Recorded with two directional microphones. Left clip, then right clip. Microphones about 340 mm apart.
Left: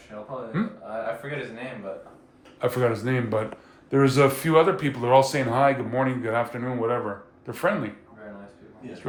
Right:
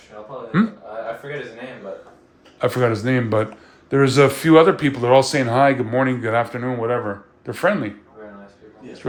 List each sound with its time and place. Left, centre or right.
0.5 s speech: right
2.6 s speech: right